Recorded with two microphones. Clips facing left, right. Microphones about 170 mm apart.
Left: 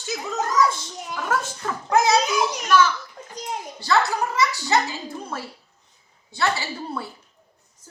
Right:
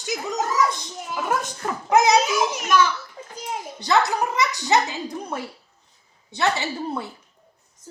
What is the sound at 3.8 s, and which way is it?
A woman's voice, 20° right (ahead or behind).